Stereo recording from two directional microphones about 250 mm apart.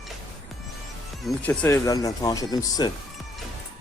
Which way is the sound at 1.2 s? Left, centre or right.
Centre.